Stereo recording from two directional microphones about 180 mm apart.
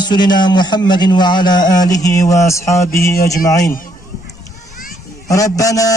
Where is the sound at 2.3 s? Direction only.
15° left (ahead or behind).